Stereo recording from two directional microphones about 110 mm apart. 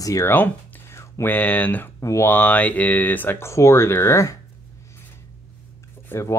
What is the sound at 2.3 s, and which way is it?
Speech, 15° left (ahead or behind).